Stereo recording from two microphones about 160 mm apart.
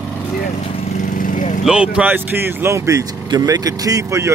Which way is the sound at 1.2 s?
55° left (ahead or behind).